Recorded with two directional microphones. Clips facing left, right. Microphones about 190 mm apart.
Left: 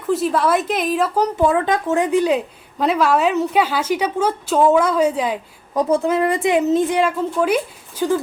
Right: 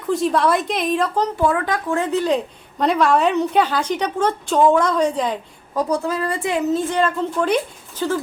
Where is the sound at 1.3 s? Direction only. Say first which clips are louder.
Left 3 dB; 20° left (ahead or behind).